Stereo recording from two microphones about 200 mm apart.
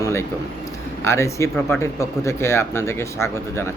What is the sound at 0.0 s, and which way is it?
A man's voice, 15° left (ahead or behind).